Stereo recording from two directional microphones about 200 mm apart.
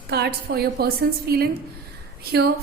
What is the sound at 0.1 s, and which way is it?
A woman's voice, 55° right (ahead or behind).